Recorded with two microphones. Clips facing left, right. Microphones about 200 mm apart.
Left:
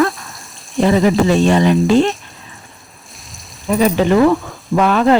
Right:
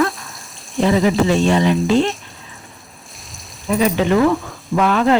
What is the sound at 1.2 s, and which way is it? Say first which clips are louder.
Speech: left 2 dB; 40° left (ahead or behind).